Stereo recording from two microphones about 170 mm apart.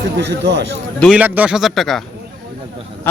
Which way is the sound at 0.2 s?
90° right.